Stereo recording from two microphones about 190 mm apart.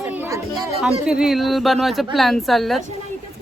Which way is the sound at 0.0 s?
10° right (ahead or behind).